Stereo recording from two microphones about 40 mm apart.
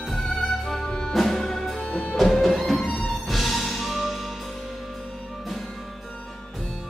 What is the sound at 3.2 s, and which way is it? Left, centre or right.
Music, centre.